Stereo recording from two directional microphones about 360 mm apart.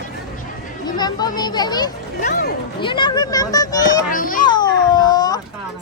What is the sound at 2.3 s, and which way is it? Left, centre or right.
Speech, left.